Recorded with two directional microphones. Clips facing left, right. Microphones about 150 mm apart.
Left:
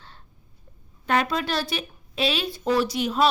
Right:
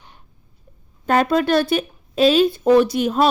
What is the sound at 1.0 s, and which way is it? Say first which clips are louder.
Speech: right 7 dB; 45° right (ahead or behind).